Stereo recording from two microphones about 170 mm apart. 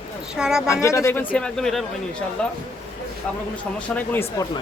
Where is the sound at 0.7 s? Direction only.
15° left (ahead or behind).